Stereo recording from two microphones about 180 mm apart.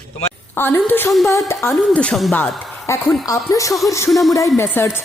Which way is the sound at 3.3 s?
15° left (ahead or behind).